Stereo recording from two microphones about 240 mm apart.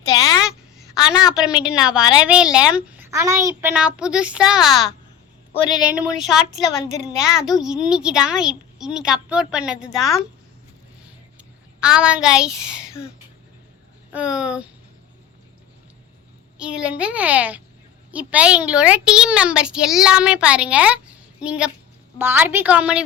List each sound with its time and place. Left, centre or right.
0.1 s a sound: centre
1.3 s a woman's voice: centre
11.8 s a woman's voice: centre
14.1 s a woman's voice: centre
16.6 s a woman's voice: centre